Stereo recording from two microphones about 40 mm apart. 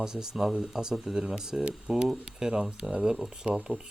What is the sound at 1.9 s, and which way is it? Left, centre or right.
Speech, right.